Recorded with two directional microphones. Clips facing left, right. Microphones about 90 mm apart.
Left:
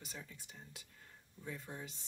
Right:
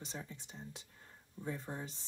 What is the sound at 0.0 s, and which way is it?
Speech, 30° right (ahead or behind).